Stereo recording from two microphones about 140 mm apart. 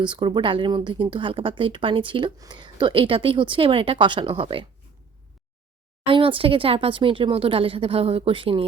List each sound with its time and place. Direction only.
0.0 s speech: 35° right (ahead or behind)
6.1 s speech: 40° right (ahead or behind)